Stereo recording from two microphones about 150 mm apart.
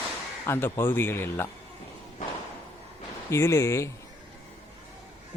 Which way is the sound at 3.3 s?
20° left (ahead or behind).